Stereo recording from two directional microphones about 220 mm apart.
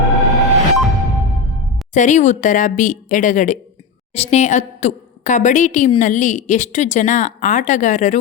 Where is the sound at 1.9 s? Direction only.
35° left (ahead or behind).